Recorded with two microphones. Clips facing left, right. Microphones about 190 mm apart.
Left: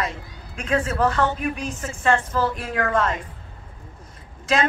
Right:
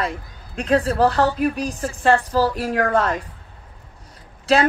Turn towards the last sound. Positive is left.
turn(degrees=-35)  # may be behind; listen again after turning